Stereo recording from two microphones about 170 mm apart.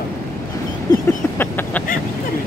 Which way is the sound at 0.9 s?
15° left (ahead or behind).